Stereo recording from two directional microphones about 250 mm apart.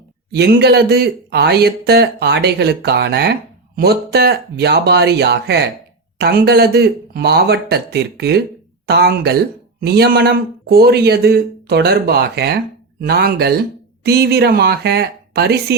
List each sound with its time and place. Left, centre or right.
0.3 s speech: right